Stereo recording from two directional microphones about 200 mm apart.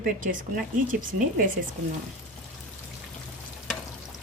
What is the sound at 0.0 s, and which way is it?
Speech, 45° right (ahead or behind).